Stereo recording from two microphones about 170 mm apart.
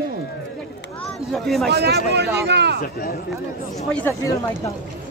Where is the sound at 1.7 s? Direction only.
75° right (ahead or behind).